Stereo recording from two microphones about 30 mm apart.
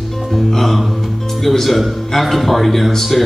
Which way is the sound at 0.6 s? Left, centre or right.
Centre.